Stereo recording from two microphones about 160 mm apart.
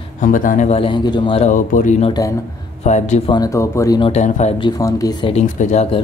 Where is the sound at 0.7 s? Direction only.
35° left (ahead or behind).